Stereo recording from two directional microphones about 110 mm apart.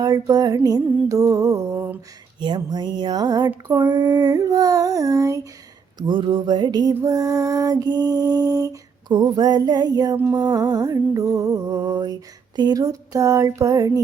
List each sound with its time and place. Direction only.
0.0 s music: 35° right (ahead or behind)
2.4 s music: 40° right (ahead or behind)
6.0 s music: 45° right (ahead or behind)